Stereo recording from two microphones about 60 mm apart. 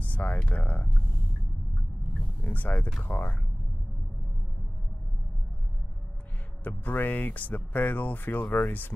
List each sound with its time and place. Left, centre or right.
0.0 s speech: left
2.4 s speech: left
6.6 s speech: left